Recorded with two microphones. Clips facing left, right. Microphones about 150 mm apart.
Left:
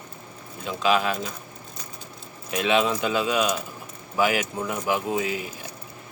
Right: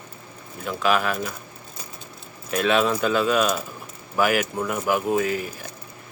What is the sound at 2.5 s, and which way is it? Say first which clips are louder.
Speech: right 2 dB; 15° left (ahead or behind).